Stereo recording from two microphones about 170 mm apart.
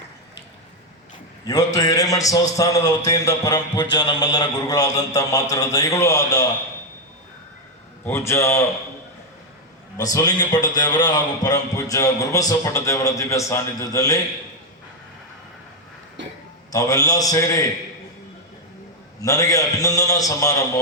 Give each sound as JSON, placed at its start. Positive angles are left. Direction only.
{"t": 1.5, "sound": "a man's voice", "side_deg": 20}
{"t": 8.0, "sound": "a man's voice", "side_deg": 15}
{"t": 10.0, "sound": "a man's voice", "side_deg": 20}
{"t": 16.7, "sound": "a man's voice", "side_deg": 20}
{"t": 19.2, "sound": "a man's voice", "side_deg": 20}